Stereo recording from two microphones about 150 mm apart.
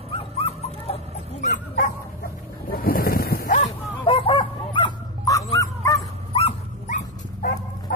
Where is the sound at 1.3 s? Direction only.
55° left (ahead or behind).